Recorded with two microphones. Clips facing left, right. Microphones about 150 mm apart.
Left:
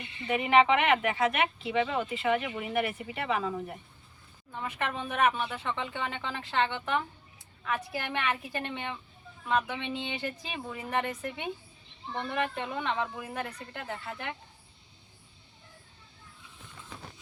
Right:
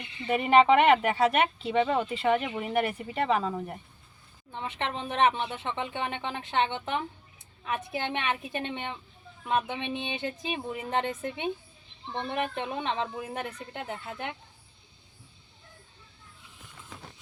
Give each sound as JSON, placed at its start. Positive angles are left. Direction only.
{"t": 0.3, "sound": "speech", "side_deg": -40}
{"t": 4.5, "sound": "speech", "side_deg": -25}